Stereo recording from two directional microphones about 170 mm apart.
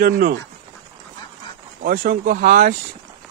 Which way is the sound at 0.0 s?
60° right (ahead or behind).